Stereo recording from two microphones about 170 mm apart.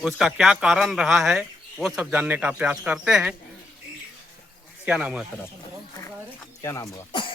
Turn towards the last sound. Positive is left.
turn(degrees=25)  # may be behind; listen again after turning